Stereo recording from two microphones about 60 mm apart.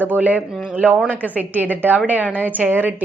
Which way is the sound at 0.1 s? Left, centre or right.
Right.